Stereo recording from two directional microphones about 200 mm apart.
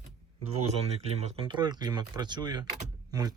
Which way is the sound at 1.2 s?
30° right (ahead or behind).